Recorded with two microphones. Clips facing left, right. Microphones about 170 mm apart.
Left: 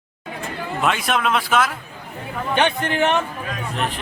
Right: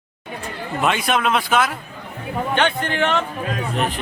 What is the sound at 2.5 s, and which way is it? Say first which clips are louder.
Speech: left 2 dB; 15° left (ahead or behind).